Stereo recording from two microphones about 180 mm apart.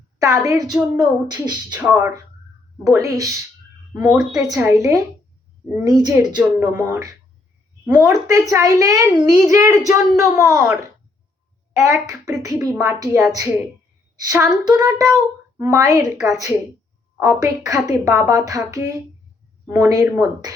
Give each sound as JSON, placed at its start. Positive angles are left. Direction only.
{"t": 0.2, "sound": "child singing", "side_deg": -20}
{"t": 1.8, "sound": "speech", "side_deg": -5}
{"t": 2.8, "sound": "a woman's voice", "side_deg": -15}
{"t": 5.8, "sound": "child singing", "side_deg": -20}
{"t": 6.4, "sound": "a woman's voice", "side_deg": -10}
{"t": 8.3, "sound": "a woman's voice", "side_deg": -20}
{"t": 11.7, "sound": "a woman's voice", "side_deg": -15}
{"t": 14.2, "sound": "child singing", "side_deg": -20}
{"t": 15.5, "sound": "a woman's voice", "side_deg": -15}
{"t": 16.2, "sound": "child singing", "side_deg": -20}
{"t": 17.2, "sound": "a woman's voice", "side_deg": -20}
{"t": 18.3, "sound": "child singing", "side_deg": -20}